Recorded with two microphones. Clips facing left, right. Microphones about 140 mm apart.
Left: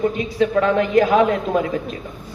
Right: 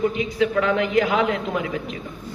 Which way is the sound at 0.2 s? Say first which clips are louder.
Left 3 dB; 40° left (ahead or behind).